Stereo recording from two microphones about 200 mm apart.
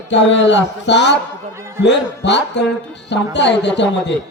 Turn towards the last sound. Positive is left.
turn(degrees=60)  # may be behind; listen again after turning